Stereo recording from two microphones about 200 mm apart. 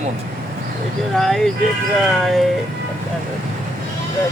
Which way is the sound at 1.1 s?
Centre (ahead or behind).